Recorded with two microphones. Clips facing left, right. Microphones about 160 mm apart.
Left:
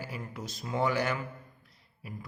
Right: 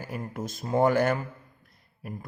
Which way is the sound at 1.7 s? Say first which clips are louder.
Right 8 dB; 50° right (ahead or behind).